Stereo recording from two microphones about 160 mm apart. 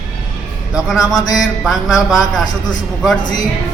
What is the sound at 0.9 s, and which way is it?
Speech, 25° left (ahead or behind).